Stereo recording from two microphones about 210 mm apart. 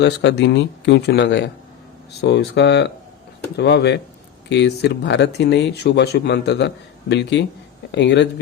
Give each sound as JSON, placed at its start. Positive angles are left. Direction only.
{"t": 0.0, "sound": "speech", "side_deg": 55}